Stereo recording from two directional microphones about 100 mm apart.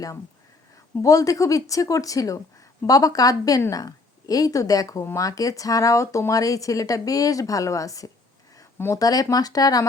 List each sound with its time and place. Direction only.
0.9 s speech: 35° left (ahead or behind)